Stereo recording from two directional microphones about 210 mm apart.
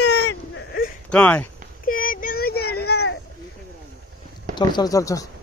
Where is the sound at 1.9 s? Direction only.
40° left (ahead or behind).